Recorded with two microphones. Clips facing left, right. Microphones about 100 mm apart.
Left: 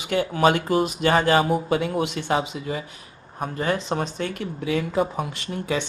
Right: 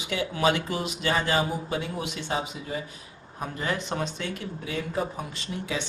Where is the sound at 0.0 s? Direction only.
45° left (ahead or behind); by 2.8 s 85° left.